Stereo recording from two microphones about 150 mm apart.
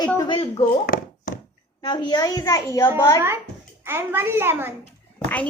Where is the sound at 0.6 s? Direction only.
70° left (ahead or behind).